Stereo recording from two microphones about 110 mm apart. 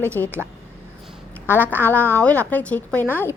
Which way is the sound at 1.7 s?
15° left (ahead or behind).